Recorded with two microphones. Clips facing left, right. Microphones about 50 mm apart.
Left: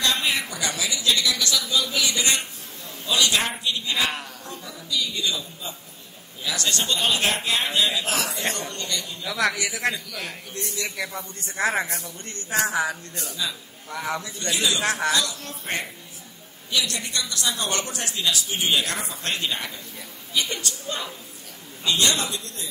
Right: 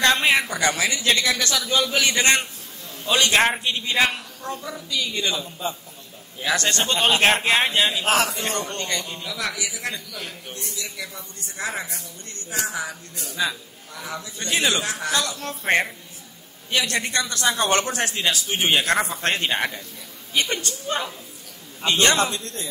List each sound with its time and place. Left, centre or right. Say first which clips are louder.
0.0 s a man's voice: right 6 dB; right
9.2 s a man's voice: left 4 dB; left
13.3 s a woman's voice: right 6 dB; right
13.9 s a man's voice: left 4 dB; left
14.5 s a man's voice: right 3 dB; right
14.8 s a man's voice: left 3 dB; left
15.1 s a man's voice: right 1 dB; right